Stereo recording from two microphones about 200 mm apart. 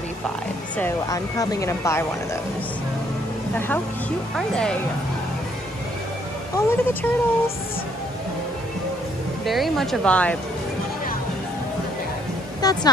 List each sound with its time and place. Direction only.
0.7 s speech: 15° left (ahead or behind)
3.5 s speech: 10° left (ahead or behind)
6.5 s speech: 10° left (ahead or behind)
9.5 s speech: centre (ahead or behind)
12.6 s speech: 20° left (ahead or behind)